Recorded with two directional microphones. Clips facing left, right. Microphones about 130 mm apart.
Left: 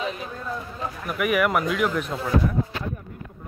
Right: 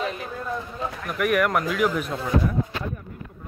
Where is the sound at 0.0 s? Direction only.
Centre (ahead or behind).